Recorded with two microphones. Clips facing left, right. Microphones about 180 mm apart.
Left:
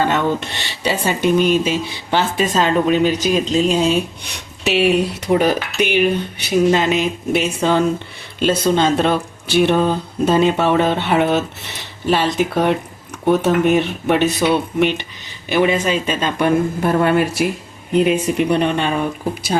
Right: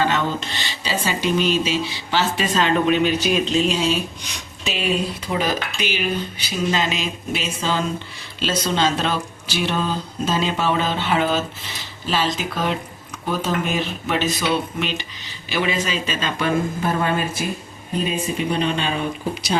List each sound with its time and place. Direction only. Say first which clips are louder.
0.3 s speech: left 2 dB; 65° left (ahead or behind)